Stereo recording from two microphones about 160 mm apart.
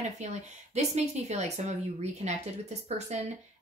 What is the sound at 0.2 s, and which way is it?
Speech, 45° right (ahead or behind).